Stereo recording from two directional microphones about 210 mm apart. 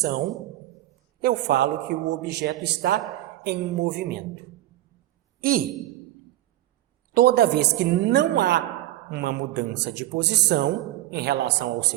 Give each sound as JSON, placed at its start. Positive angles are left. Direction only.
{"t": 0.0, "sound": "a man's voice", "side_deg": -40}
{"t": 1.2, "sound": "a man's voice", "side_deg": -50}
{"t": 5.4, "sound": "a man's voice", "side_deg": -45}
{"t": 7.1, "sound": "a man's voice", "side_deg": -50}